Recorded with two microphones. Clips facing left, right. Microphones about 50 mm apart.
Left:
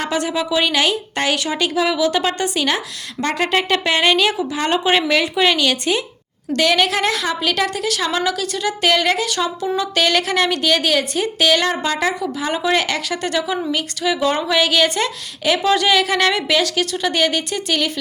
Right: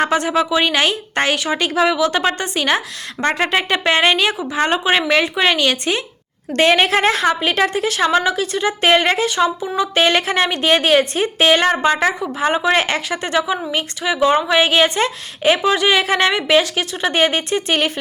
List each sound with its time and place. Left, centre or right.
0.0 s a woman's voice: right
4.8 s a woman's voice: centre; by 17.9 s right